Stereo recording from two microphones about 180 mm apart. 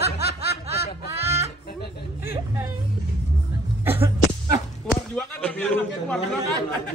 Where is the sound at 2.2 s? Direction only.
15° right (ahead or behind).